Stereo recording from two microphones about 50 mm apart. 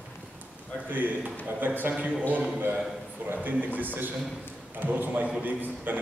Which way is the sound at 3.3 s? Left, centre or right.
Right.